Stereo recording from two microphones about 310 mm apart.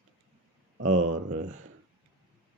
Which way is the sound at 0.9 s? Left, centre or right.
Right.